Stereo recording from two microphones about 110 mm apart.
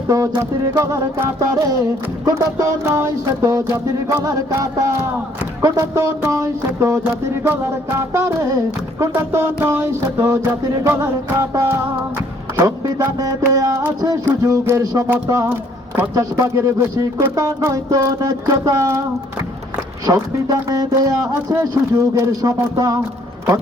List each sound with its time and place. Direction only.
0.1 s music: 30° right (ahead or behind)
16.1 s music: 30° right (ahead or behind)
20.5 s music: 30° right (ahead or behind)